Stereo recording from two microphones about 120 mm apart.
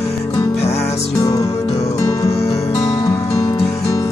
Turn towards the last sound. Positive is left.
turn(degrees=25)  # may be behind; listen again after turning